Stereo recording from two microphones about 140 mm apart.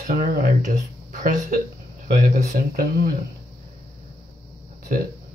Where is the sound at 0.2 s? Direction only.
70° right (ahead or behind).